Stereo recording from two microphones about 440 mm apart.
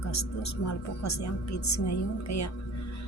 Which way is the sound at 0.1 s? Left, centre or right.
Left.